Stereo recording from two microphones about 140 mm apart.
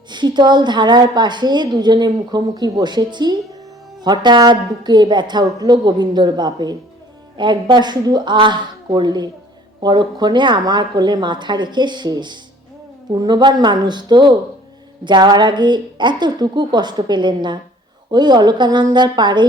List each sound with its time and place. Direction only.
0.1 s a woman's voice: 30° right (ahead or behind)